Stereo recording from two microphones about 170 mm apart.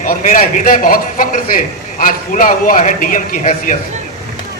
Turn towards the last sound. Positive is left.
turn(degrees=50)  # may be behind; listen again after turning